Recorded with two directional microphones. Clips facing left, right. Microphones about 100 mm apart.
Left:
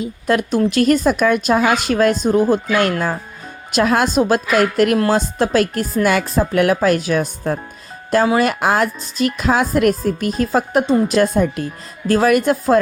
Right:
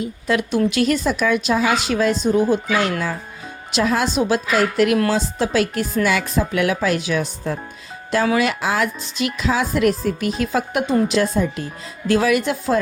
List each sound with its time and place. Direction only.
0.3 s a woman's voice: 45° left (ahead or behind)
11.1 s a woman's voice: 50° left (ahead or behind)